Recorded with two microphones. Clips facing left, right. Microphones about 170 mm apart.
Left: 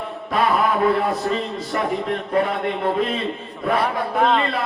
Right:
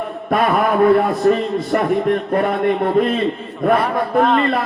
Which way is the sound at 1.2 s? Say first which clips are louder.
Right 8 dB; 55° right (ahead or behind).